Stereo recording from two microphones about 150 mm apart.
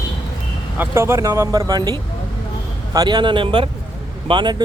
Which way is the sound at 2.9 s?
30° right (ahead or behind).